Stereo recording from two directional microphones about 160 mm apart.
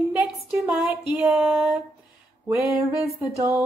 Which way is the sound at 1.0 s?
5° right (ahead or behind).